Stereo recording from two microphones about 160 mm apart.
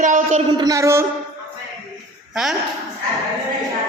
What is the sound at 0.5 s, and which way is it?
Speech, 25° right (ahead or behind).